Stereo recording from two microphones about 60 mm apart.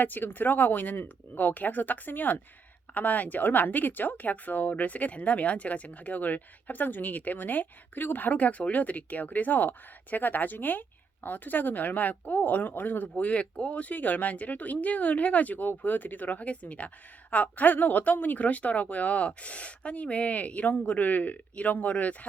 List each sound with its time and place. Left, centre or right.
0.0 s speech: left